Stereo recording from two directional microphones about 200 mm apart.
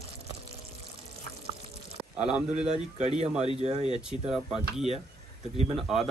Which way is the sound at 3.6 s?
35° right (ahead or behind).